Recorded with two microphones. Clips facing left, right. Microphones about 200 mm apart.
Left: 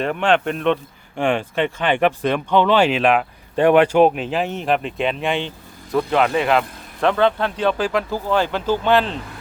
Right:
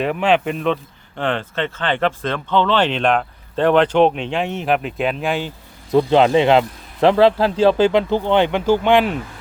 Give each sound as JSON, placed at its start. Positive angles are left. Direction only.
{"t": 0.0, "sound": "speech", "side_deg": -5}
{"t": 1.1, "sound": "speech", "side_deg": 10}
{"t": 5.9, "sound": "speech", "side_deg": -25}